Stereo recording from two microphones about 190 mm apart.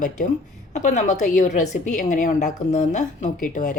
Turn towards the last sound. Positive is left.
turn(degrees=45)  # may be behind; listen again after turning